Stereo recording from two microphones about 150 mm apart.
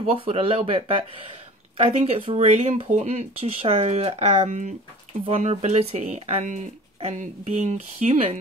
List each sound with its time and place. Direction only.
0.0 s speech: 35° right (ahead or behind)
5.2 s speech: 40° right (ahead or behind)